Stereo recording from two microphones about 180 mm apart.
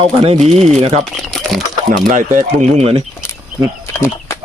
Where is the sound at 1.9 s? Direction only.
45° right (ahead or behind).